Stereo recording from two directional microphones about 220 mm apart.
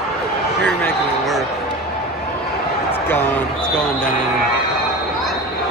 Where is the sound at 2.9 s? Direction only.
10° left (ahead or behind).